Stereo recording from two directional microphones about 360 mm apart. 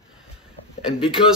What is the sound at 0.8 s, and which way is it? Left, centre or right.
Speech, centre.